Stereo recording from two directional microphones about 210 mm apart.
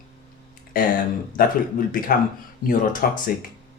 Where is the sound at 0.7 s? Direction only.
45° left (ahead or behind).